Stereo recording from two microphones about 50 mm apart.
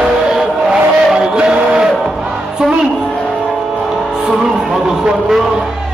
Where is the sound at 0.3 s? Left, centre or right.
Centre.